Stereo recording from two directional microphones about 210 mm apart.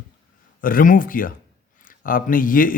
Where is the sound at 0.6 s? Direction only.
40° left (ahead or behind).